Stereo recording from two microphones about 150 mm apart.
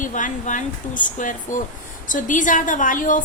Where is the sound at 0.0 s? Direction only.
60° left (ahead or behind).